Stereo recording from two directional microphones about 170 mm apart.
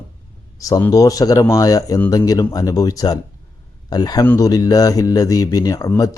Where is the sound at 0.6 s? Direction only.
20° left (ahead or behind).